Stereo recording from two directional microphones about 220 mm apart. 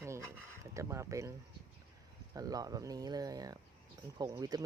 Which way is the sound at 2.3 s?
15° right (ahead or behind).